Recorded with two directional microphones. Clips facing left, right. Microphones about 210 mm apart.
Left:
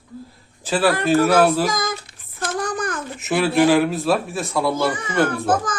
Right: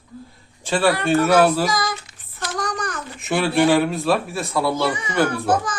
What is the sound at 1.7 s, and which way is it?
Child singing, 50° left (ahead or behind).